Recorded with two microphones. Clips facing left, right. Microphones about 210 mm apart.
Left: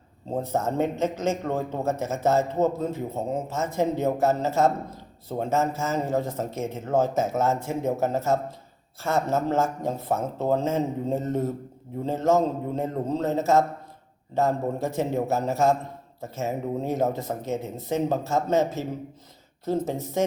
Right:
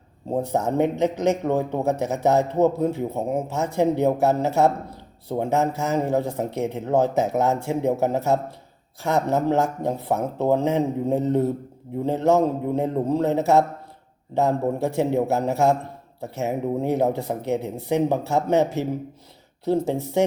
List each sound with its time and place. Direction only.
0.3 s a man's voice: 15° right (ahead or behind)